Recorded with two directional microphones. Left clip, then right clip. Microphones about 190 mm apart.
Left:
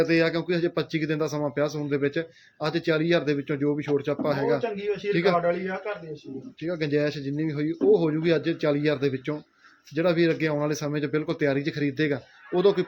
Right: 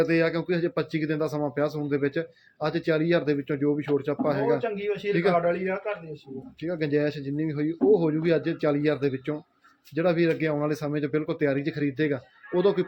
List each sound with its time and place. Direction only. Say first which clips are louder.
0.0 s speech: left 1 dB; 5° left (ahead or behind)
5.5 s a man's voice: even; 25° right (ahead or behind)
6.6 s speech: even; 5° left (ahead or behind)